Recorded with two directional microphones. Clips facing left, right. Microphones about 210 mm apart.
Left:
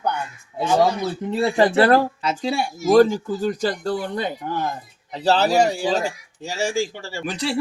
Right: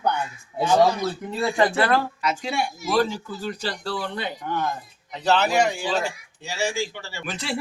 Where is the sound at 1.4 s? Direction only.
35° left (ahead or behind).